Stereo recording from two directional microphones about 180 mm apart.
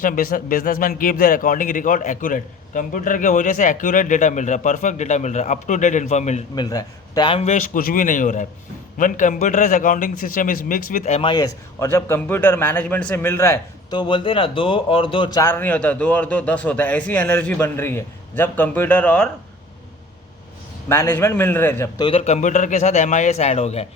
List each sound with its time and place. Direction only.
0.0 s a man's voice: 50° left (ahead or behind)
6.6 s a man's voice: 20° left (ahead or behind)
20.9 s a man's voice: 15° left (ahead or behind)
21.9 s a man's voice: 30° left (ahead or behind)